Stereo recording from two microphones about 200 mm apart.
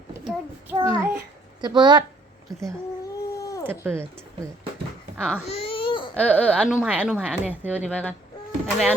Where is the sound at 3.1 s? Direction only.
15° left (ahead or behind).